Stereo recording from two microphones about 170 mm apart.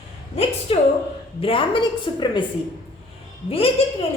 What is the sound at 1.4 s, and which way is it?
A woman's voice, 30° left (ahead or behind).